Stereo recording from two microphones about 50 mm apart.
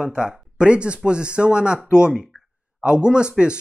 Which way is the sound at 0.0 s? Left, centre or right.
Centre.